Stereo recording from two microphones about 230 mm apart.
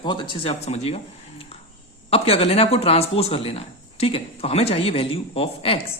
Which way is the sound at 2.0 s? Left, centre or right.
Left.